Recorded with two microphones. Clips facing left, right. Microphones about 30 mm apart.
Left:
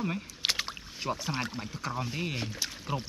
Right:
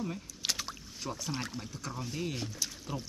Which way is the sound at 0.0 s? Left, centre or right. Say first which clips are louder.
Left 5 dB; left.